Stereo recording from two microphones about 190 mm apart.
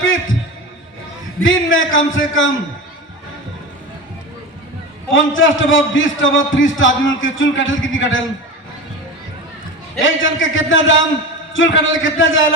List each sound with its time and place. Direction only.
1.4 s a man's voice: 90° left
5.1 s a man's voice: 90° left
10.0 s a man's voice: 90° left